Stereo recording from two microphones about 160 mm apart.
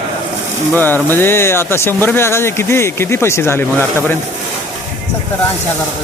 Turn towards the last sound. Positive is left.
turn(degrees=15)  # may be behind; listen again after turning